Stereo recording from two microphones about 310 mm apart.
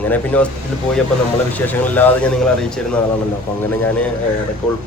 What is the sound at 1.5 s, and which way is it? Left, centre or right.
A man's voice, centre.